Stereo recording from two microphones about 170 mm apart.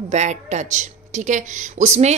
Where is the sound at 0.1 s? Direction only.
40° right (ahead or behind).